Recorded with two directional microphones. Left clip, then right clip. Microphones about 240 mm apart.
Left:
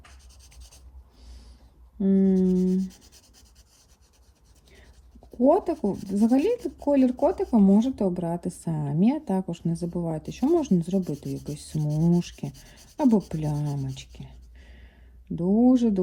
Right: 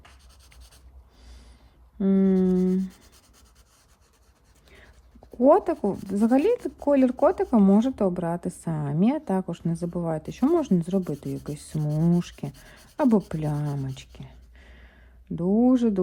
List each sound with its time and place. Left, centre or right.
2.0 s rub: right
5.3 s a woman's voice: centre
11.8 s a woman's voice: centre